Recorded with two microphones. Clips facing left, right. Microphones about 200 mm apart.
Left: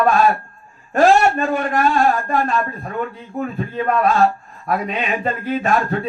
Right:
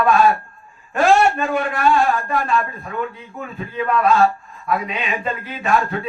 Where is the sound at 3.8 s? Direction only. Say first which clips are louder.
Even; 40° left (ahead or behind).